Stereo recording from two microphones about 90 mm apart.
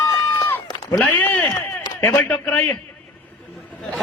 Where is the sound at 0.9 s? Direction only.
20° left (ahead or behind).